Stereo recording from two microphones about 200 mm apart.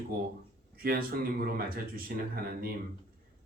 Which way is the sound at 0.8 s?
50° right (ahead or behind).